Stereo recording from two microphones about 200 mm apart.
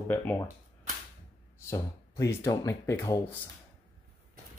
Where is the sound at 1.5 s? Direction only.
15° left (ahead or behind).